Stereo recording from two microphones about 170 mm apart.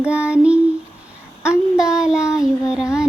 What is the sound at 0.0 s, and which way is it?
Child singing, 5° right (ahead or behind).